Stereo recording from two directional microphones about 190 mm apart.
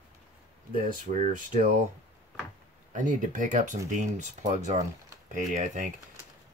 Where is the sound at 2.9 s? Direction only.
40° right (ahead or behind).